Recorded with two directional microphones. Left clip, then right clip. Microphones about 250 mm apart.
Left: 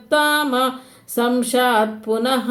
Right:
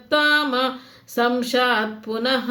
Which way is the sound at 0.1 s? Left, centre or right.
Centre.